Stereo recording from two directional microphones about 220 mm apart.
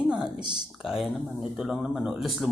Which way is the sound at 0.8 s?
Centre (ahead or behind).